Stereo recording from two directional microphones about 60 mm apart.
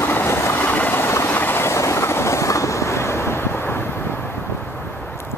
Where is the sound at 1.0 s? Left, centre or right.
Left.